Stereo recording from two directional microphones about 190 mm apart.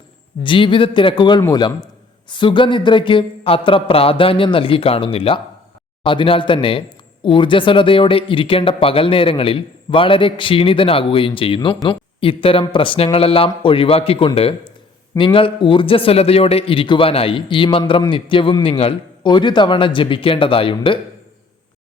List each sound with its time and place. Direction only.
0.4 s speech: 25° left (ahead or behind)